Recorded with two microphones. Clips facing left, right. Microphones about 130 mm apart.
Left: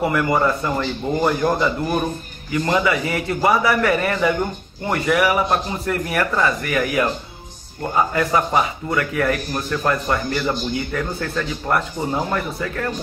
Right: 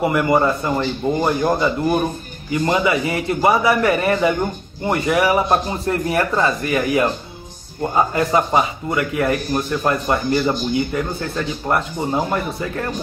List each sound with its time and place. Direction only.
0.1 s speech: 25° right (ahead or behind)
8.1 s speech: 25° right (ahead or behind)